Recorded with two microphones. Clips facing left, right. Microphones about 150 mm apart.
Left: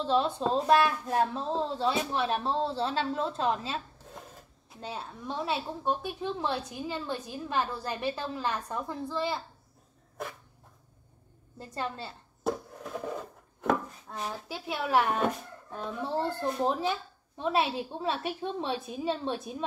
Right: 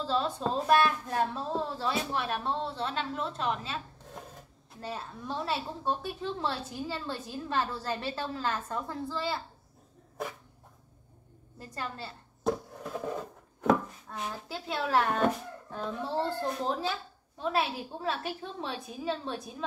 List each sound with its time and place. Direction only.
0.0 s a woman's voice: 20° left (ahead or behind)
4.7 s a woman's voice: 15° left (ahead or behind)
11.5 s a woman's voice: 25° left (ahead or behind)
12.4 s a sound: centre (ahead or behind)
14.1 s a woman's voice: 15° left (ahead or behind)
16.6 s a woman's voice: 15° left (ahead or behind)